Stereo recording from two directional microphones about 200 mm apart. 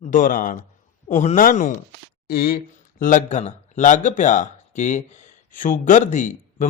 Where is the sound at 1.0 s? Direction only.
35° left (ahead or behind).